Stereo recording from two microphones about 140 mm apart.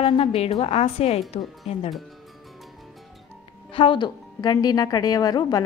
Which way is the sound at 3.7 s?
35° left (ahead or behind).